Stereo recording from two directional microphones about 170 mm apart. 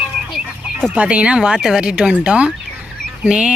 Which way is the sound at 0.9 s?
5° right (ahead or behind).